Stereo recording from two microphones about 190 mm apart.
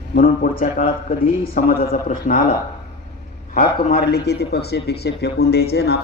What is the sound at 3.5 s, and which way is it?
Speech, 35° left (ahead or behind).